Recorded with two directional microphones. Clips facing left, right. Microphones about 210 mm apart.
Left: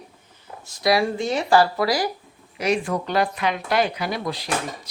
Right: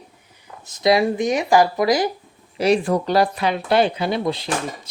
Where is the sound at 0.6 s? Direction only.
20° right (ahead or behind).